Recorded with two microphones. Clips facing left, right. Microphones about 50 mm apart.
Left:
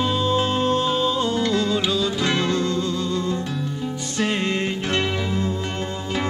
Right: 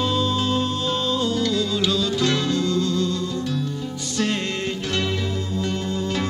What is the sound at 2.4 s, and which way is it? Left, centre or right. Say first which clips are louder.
Music: even; left.